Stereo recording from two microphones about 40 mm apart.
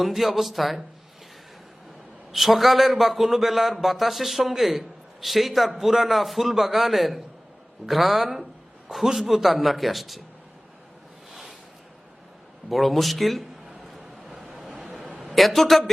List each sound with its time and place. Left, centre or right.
0.0 s a man's voice: centre
2.3 s a man's voice: centre
11.3 s a sound: centre
12.7 s a man's voice: centre
13.9 s vehicle: centre
14.8 s a sound: centre
15.4 s a man's voice: centre